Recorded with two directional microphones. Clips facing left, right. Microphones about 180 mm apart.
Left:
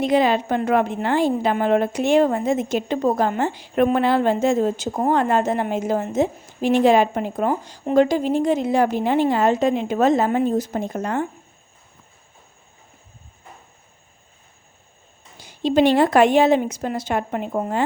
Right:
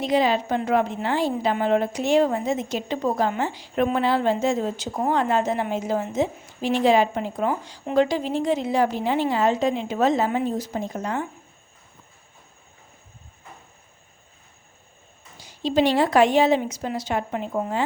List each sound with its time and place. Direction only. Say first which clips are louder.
0.0 s a woman's voice: left 3 dB; 55° left (ahead or behind)
15.4 s a woman's voice: left 4 dB; 55° left (ahead or behind)